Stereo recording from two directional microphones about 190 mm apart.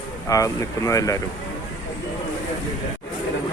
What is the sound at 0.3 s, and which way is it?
Speech, 15° left (ahead or behind).